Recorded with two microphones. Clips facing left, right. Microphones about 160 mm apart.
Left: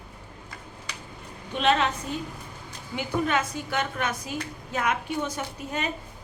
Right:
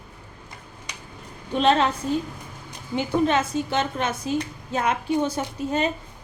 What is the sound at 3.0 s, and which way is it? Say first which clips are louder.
A woman's voice: right 5 dB; 25° right (ahead or behind).